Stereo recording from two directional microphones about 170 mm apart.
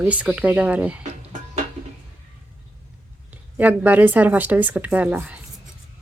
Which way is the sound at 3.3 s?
10° right (ahead or behind).